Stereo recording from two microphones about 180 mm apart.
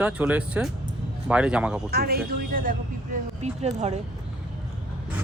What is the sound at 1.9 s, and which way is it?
A man's voice, 60° right (ahead or behind).